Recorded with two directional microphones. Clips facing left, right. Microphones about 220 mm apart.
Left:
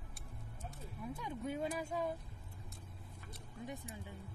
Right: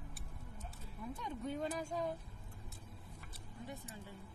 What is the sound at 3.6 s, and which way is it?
Speech, 15° left (ahead or behind).